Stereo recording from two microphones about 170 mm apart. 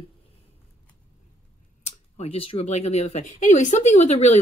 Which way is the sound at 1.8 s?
40° left (ahead or behind).